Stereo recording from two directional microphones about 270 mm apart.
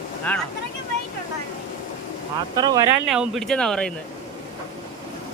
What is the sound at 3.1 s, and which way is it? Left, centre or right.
Speech, centre.